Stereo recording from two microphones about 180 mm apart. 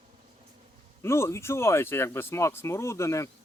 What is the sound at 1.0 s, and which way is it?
Speech, 15° left (ahead or behind).